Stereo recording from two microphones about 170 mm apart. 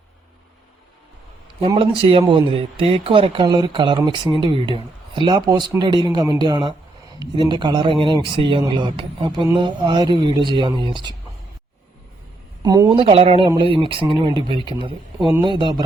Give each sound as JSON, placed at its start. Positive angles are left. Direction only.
{"t": 1.6, "sound": "speech", "side_deg": -30}
{"t": 12.6, "sound": "speech", "side_deg": -25}